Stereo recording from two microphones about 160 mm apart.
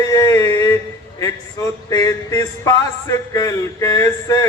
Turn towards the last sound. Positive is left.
turn(degrees=20)  # may be behind; listen again after turning